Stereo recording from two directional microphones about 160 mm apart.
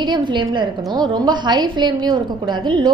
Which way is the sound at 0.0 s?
30° right (ahead or behind).